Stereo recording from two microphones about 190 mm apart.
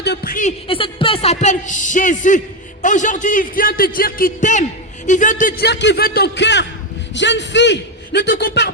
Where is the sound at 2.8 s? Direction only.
40° left (ahead or behind); by 8.2 s 65° left (ahead or behind).